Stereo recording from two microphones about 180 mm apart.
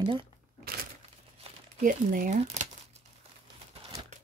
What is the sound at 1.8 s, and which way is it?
Speech, 50° right (ahead or behind).